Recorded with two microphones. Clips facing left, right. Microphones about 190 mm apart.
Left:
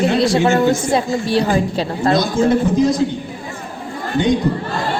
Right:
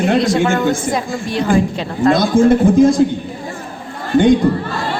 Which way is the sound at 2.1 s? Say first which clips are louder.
Right 4 dB; 50° right (ahead or behind).